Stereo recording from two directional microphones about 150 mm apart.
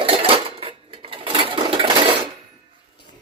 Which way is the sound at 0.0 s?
40° right (ahead or behind).